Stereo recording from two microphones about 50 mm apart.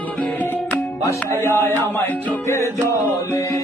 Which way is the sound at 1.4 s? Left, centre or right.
Left.